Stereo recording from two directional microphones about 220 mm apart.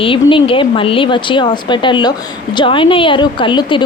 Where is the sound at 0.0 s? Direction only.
25° left (ahead or behind).